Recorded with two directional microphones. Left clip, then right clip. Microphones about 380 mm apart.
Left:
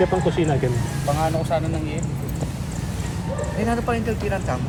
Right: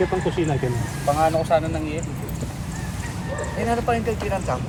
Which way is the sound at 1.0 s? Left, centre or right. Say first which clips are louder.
Right 4 dB; right.